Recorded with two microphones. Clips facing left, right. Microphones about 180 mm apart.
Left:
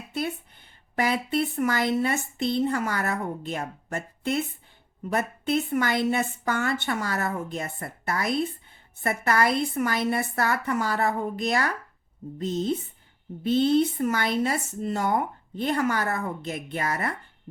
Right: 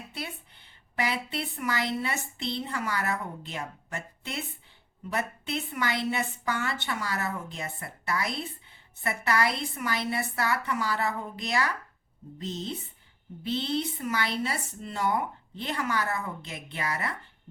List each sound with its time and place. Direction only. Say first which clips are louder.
0.1 s a woman's voice: left 12 dB; 50° left (ahead or behind)